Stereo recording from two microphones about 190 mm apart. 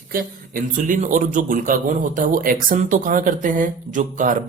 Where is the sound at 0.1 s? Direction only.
50° right (ahead or behind).